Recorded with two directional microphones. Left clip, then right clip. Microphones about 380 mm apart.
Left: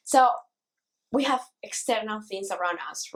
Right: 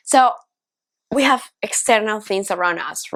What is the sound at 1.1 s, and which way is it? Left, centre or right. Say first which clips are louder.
A woman's voice: right 9 dB; right.